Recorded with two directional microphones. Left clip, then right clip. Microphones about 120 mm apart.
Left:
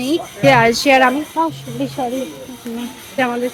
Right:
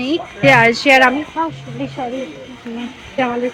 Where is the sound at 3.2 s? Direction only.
15° left (ahead or behind).